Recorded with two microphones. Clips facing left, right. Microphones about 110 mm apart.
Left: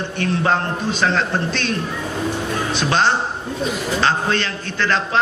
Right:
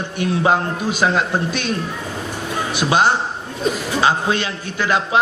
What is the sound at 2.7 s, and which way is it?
A man's voice, 10° right (ahead or behind).